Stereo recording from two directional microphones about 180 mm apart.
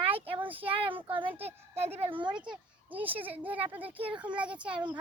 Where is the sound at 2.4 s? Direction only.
5° right (ahead or behind).